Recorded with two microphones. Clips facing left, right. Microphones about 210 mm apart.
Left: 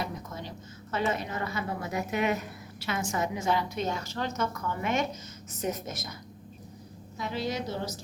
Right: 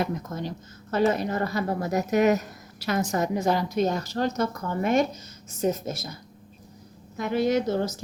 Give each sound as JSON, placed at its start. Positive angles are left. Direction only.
{"t": 0.0, "sound": "a woman's voice", "side_deg": -45}
{"t": 7.2, "sound": "a woman's voice", "side_deg": -50}